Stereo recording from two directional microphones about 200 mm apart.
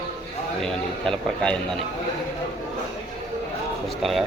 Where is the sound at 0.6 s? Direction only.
5° left (ahead or behind).